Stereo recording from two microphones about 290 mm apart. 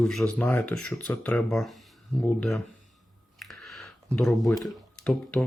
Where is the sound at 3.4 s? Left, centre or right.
Centre.